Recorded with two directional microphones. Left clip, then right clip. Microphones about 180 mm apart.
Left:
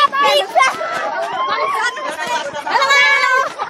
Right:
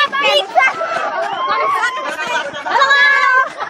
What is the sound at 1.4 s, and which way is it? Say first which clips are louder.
Chatter: right 3 dB; 25° right (ahead or behind).